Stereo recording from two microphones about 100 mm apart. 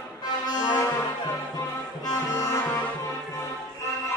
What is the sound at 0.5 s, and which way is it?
Music, 45° left (ahead or behind).